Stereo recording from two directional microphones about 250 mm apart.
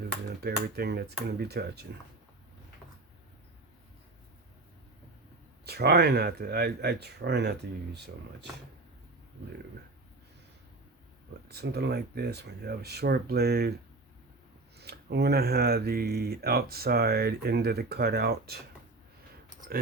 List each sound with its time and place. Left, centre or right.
0.3 s speech: right
5.6 s speech: right
11.4 s speech: right
14.8 s speech: right